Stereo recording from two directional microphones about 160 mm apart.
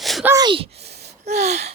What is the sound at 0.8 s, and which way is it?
Gasp, 90° right.